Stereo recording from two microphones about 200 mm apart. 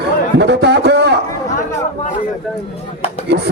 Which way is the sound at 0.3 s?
60° right (ahead or behind).